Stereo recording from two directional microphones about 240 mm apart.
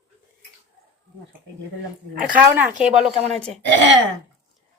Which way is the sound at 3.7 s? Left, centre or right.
Right.